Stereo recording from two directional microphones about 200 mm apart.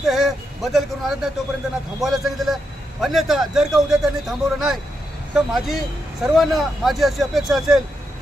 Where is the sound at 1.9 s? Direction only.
Centre (ahead or behind).